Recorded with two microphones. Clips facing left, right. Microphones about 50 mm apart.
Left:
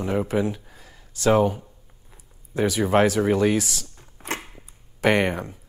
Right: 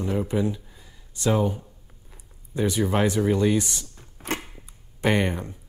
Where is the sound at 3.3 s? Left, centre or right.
Left.